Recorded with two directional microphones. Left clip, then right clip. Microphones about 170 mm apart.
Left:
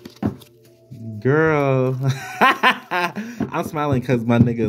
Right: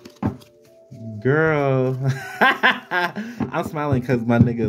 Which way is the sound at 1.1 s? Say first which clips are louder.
Left 1 dB; 10° left (ahead or behind).